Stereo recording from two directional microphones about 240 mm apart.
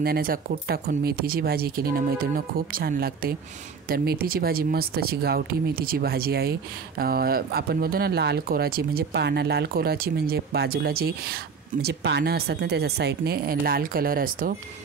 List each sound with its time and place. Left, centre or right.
0.0 s speech: right